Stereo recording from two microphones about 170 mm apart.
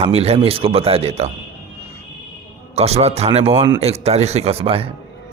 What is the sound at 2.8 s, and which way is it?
Speech, 35° right (ahead or behind).